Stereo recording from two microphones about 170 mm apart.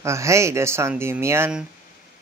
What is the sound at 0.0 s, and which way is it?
Speech, 15° right (ahead or behind).